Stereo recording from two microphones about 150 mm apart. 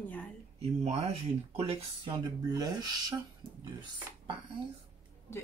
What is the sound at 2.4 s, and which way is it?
Speech, 25° right (ahead or behind).